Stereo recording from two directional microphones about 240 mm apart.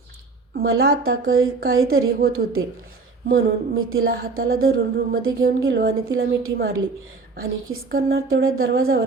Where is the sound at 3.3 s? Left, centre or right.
Right.